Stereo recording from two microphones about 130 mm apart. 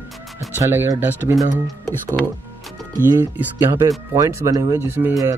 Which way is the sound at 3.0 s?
15° right (ahead or behind).